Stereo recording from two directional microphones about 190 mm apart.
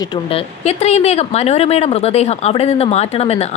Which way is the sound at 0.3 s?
30° left (ahead or behind).